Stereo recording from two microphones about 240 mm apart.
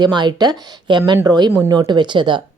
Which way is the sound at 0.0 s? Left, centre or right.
Centre.